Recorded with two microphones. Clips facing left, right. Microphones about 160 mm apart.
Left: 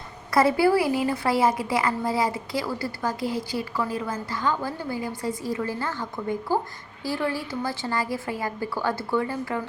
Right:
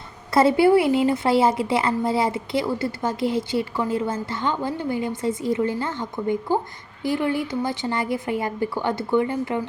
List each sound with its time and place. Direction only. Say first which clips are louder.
0.3 s a woman's voice: right 4 dB; 25° right (ahead or behind)